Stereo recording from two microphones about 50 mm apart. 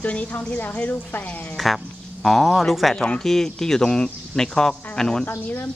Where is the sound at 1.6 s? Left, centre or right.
Centre.